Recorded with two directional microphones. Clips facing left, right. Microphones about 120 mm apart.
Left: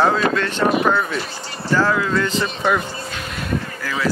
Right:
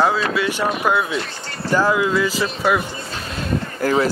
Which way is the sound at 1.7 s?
15° right (ahead or behind).